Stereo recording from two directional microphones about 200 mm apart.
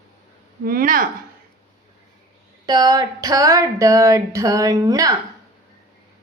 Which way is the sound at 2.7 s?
20° right (ahead or behind).